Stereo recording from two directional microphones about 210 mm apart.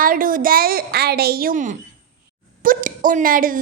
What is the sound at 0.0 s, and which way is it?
A woman's voice, 40° right (ahead or behind).